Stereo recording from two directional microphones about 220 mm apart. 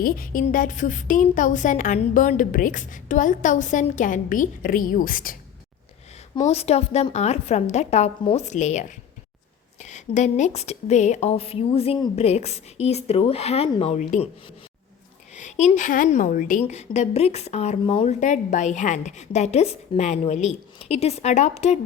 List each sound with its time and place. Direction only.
0.0 s a woman's voice: 40° left (ahead or behind)
6.3 s speech: 30° left (ahead or behind)
15.4 s a woman's voice: 35° left (ahead or behind)